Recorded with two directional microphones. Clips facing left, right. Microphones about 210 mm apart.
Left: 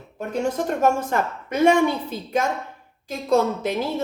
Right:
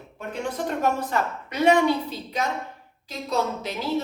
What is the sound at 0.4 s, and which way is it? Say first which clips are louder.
Speech: left 4 dB; 45° left (ahead or behind).